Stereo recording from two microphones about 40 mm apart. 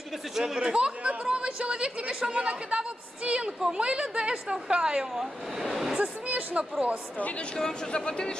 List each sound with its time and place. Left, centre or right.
0.1 s speech: centre
0.6 s speech: right
1.0 s a sound: right
2.2 s a woman's voice: right
5.1 s speech: centre
6.0 s speech: right
7.2 s a woman's voice: left
7.5 s speech: centre